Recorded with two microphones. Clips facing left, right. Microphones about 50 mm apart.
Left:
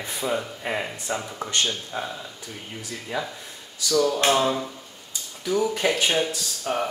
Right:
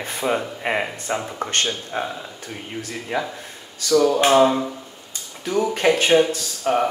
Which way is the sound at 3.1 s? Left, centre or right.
Right.